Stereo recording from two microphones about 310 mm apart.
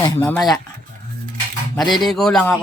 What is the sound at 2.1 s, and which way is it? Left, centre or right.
Speech, centre.